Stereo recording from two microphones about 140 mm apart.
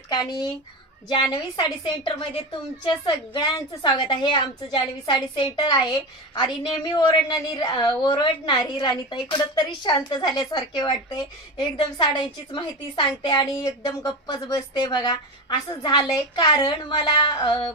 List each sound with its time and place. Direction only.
0.1 s a woman's voice: 30° left (ahead or behind)